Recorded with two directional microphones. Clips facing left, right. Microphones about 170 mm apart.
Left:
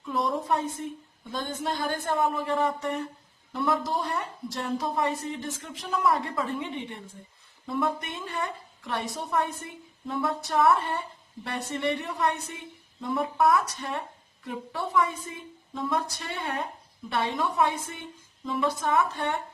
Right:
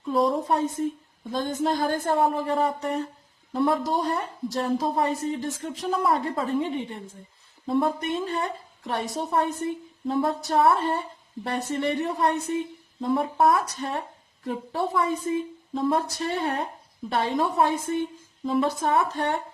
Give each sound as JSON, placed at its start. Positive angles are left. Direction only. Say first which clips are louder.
{"t": 0.1, "sound": "a woman's voice", "louder": "right 4 dB", "side_deg": -35}
{"t": 7.7, "sound": "a woman's voice", "louder": "right 5 dB", "side_deg": -30}